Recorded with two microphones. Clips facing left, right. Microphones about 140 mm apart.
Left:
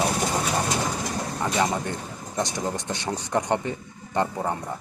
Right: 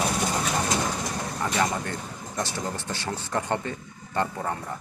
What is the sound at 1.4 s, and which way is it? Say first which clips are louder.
Speech: left 2 dB; 20° left (ahead or behind).